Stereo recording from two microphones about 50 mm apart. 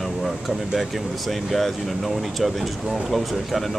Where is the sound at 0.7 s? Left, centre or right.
Centre.